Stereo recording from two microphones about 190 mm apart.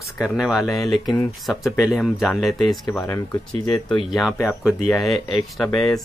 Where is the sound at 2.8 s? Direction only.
15° left (ahead or behind).